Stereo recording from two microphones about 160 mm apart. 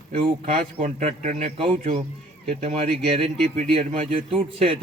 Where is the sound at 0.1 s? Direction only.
55° right (ahead or behind).